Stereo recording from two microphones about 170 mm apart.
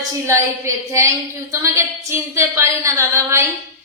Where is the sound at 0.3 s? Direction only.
15° right (ahead or behind).